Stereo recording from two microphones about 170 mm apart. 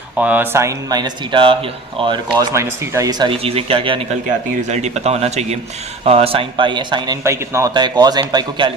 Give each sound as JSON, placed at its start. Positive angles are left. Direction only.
{"t": 0.2, "sound": "speech", "side_deg": -10}
{"t": 7.3, "sound": "speech", "side_deg": -15}